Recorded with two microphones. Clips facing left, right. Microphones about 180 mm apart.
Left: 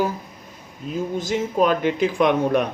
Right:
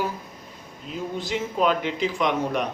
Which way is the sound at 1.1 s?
45° left (ahead or behind).